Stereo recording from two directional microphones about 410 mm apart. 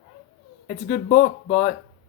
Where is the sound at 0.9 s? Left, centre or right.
Left.